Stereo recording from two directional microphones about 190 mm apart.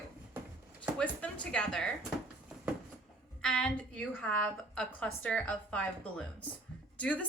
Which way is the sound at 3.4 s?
5° left (ahead or behind).